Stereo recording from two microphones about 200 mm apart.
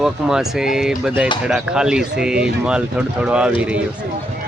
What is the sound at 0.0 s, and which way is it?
Speech, 5° right (ahead or behind).